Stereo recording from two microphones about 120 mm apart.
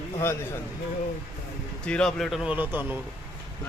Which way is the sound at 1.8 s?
5° left (ahead or behind).